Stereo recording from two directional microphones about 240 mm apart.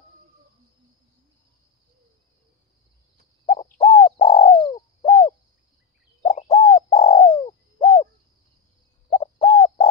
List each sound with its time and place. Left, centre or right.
3.4 s bird: left
9.1 s bird: left